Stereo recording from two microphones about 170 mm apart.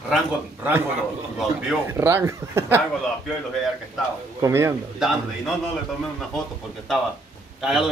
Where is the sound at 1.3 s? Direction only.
5° right (ahead or behind).